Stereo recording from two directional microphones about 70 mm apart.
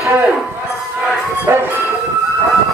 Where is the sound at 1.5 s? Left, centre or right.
Right.